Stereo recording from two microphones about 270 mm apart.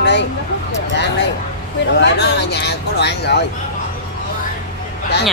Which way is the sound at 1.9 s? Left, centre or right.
Left.